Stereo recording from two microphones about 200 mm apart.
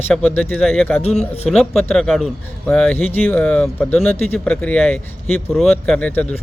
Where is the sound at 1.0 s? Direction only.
30° left (ahead or behind).